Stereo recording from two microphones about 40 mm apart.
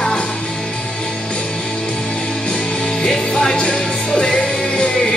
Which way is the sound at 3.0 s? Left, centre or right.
Left.